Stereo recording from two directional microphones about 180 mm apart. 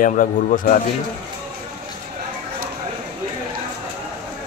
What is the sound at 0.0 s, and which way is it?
Speech, 45° left (ahead or behind).